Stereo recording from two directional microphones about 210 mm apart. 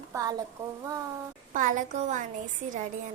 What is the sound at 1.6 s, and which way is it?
Speech, 40° right (ahead or behind).